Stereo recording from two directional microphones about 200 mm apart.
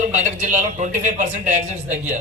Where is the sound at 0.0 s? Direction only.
35° right (ahead or behind).